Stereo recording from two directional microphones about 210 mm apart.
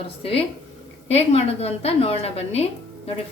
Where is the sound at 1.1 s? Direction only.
30° left (ahead or behind).